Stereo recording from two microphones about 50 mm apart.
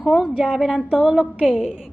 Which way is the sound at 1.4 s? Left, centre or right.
Centre.